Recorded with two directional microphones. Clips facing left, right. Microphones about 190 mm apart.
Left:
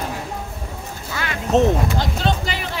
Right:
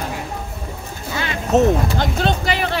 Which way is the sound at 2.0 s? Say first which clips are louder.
Right 2 dB; 65° right (ahead or behind).